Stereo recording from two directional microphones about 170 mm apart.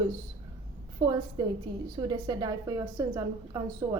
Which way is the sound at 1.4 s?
25° right (ahead or behind).